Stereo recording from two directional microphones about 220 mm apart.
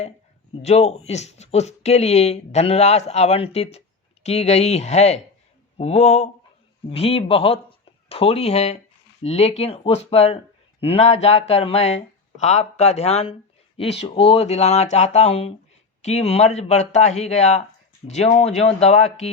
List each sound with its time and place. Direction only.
0.6 s speech: 30° left (ahead or behind)